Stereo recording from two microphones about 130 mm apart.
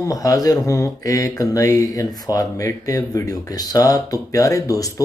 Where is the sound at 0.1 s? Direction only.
25° left (ahead or behind).